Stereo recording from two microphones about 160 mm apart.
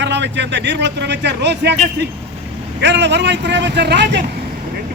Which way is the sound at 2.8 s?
90° right.